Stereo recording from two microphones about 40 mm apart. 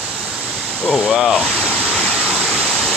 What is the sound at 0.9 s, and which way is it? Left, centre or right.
Speech, centre.